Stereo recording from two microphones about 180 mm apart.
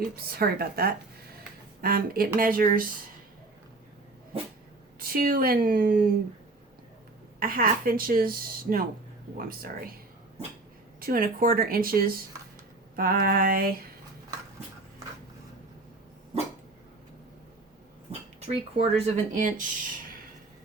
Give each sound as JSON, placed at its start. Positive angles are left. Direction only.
{"t": 0.0, "sound": "speech", "side_deg": -55}
{"t": 4.9, "sound": "a woman's voice", "side_deg": -55}
{"t": 7.3, "sound": "a woman's voice", "side_deg": -55}
{"t": 11.0, "sound": "speech", "side_deg": -50}
{"t": 18.3, "sound": "speech", "side_deg": -35}